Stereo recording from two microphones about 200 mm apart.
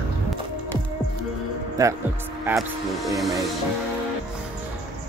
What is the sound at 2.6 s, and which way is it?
Music, centre (ahead or behind).